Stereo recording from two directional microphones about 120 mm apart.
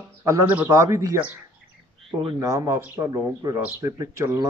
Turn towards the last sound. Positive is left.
turn(degrees=-25)  # may be behind; listen again after turning